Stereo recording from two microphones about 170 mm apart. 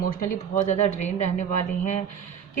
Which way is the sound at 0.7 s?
40° left (ahead or behind).